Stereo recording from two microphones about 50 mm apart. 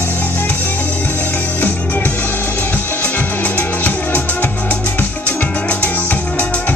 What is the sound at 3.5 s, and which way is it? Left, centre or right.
Music, left.